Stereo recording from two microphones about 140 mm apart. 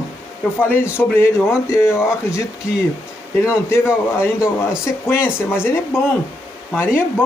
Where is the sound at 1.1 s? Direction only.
20° left (ahead or behind).